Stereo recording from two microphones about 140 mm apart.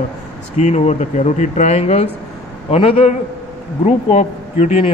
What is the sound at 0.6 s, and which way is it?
Speech, 55° left (ahead or behind).